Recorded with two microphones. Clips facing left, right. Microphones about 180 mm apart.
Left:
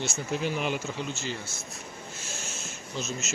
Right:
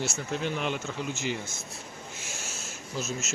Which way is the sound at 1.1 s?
15° right (ahead or behind).